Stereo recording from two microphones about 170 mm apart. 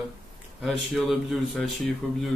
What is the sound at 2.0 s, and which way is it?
Speech, 5° left (ahead or behind).